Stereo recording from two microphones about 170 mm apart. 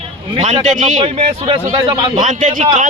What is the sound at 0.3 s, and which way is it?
Speech, 40° right (ahead or behind).